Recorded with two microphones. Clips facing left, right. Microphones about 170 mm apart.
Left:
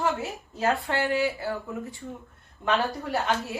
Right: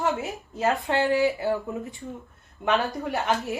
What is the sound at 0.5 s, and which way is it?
A woman's voice, 20° right (ahead or behind).